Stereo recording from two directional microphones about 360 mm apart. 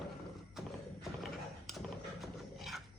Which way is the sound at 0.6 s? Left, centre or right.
Centre.